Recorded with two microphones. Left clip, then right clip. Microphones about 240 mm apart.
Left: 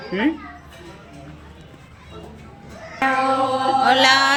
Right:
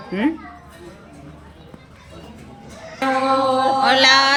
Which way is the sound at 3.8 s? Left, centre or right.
Centre.